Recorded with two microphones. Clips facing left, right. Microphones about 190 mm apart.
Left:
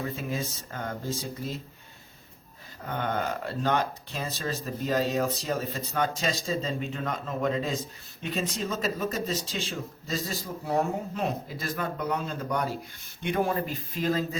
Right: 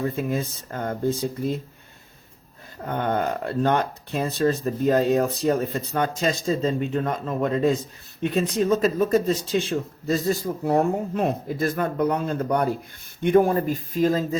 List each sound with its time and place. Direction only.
0.0 s a man's voice: 55° right (ahead or behind)
2.8 s a man's voice: 55° right (ahead or behind)